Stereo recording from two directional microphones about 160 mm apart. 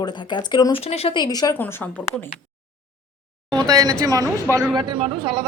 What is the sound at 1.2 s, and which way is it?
Speech, 25° left (ahead or behind).